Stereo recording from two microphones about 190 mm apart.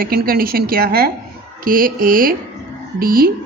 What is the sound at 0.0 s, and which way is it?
A woman's voice, 50° right (ahead or behind).